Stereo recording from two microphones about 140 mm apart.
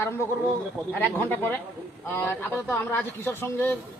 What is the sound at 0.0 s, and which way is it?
A man's voice, 15° left (ahead or behind).